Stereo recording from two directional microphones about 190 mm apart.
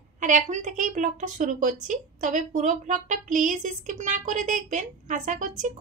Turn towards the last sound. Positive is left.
turn(degrees=-40)  # may be behind; listen again after turning